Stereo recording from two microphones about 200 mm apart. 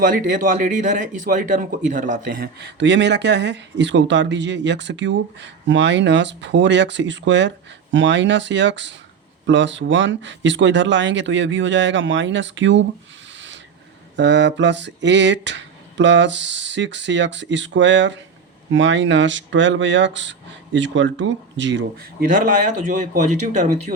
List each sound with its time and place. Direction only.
0.0 s speech: 40° right (ahead or behind); by 12.8 s 65° right (ahead or behind)
14.2 s speech: 60° right (ahead or behind)
22.3 s speech: 45° right (ahead or behind)